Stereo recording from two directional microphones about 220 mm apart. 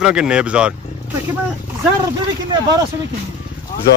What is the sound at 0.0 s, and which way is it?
Speech, 5° right (ahead or behind).